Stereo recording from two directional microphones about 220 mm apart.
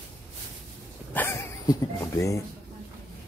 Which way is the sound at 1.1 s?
10° left (ahead or behind).